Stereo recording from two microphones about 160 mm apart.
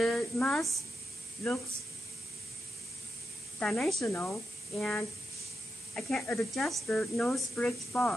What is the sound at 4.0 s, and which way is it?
Speech, 15° left (ahead or behind).